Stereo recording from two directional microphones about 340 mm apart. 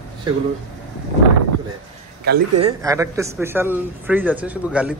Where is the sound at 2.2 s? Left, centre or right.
Right.